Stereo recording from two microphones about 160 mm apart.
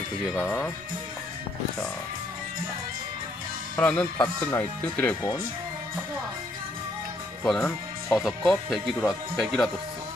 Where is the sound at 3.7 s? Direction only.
10° left (ahead or behind).